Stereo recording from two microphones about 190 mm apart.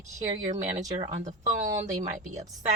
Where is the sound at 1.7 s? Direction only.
40° right (ahead or behind).